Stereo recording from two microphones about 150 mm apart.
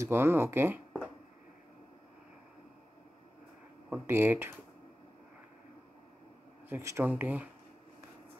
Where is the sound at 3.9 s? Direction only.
15° right (ahead or behind).